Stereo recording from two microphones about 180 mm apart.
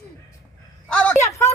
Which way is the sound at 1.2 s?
15° left (ahead or behind).